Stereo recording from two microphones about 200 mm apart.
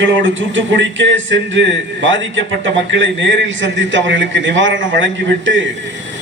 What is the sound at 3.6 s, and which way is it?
A man's voice, 65° right (ahead or behind).